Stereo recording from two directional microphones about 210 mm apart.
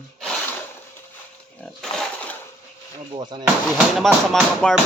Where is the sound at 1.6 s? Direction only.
5° left (ahead or behind).